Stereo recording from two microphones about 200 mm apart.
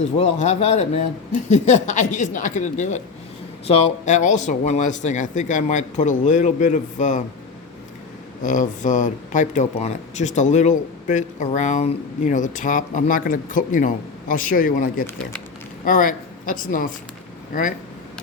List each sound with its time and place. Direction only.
0.2 s speech: 35° left (ahead or behind)
8.4 s speech: 40° left (ahead or behind)
15.0 s speech: 5° left (ahead or behind)
15.8 s speech: 45° left (ahead or behind)